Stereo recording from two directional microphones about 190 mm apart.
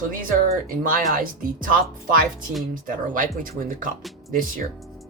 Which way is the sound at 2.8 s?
45° right (ahead or behind).